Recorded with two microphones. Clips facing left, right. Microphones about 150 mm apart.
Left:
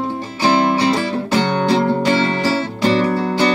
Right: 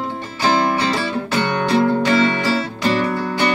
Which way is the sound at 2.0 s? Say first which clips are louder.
Even; 30° left (ahead or behind).